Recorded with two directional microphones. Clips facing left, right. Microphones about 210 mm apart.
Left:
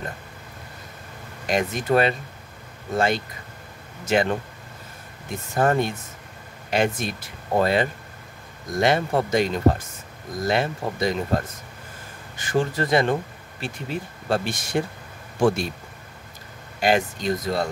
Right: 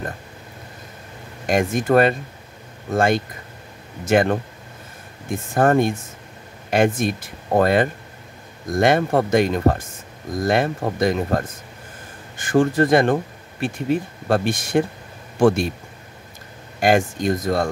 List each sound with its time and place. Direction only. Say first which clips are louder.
1.5 s speech: right 4 dB; 50° right (ahead or behind)
16.8 s speech: right 4 dB; 50° right (ahead or behind)